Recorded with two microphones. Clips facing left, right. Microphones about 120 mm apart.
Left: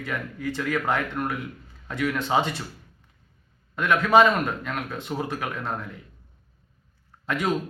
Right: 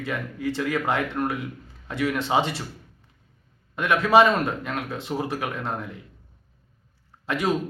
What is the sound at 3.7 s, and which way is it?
Speech, 25° right (ahead or behind).